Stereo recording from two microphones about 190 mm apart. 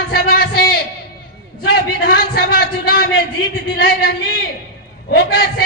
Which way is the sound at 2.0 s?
55° left (ahead or behind).